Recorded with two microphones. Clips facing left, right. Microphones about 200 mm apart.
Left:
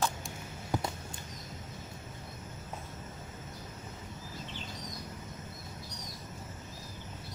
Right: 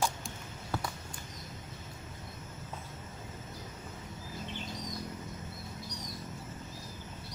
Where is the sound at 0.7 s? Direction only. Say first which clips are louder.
Left 3 dB; 15° left (ahead or behind).